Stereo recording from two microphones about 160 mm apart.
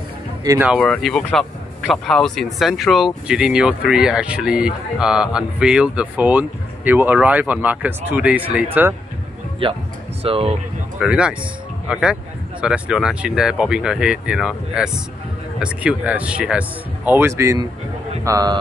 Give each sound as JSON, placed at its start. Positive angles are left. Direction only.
{"t": 0.7, "sound": "speech", "side_deg": 5}
{"t": 9.6, "sound": "speech", "side_deg": -30}
{"t": 11.0, "sound": "speech", "side_deg": -5}